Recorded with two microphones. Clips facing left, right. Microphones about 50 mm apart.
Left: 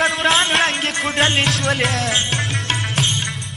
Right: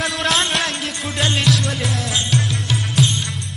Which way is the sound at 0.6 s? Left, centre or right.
Left.